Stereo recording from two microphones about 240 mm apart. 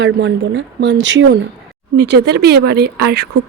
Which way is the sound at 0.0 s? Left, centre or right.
Right.